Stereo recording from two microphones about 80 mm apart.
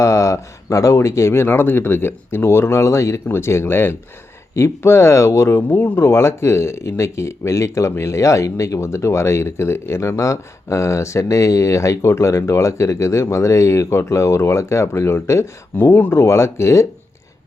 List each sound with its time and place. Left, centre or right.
0.0 s speech: left
5.6 s speech: left
15.7 s speech: left
16.2 s speech: left